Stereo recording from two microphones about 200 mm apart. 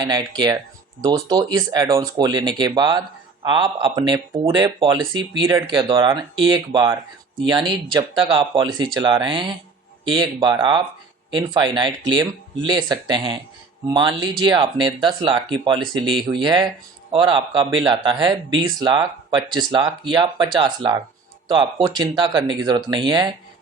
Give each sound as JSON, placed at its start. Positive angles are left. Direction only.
{"t": 0.0, "sound": "speech", "side_deg": -20}